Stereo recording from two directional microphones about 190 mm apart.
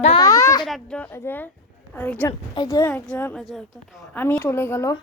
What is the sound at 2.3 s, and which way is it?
Speech, 20° left (ahead or behind).